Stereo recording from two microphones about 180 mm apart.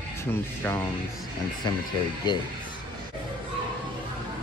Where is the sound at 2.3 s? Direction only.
25° left (ahead or behind).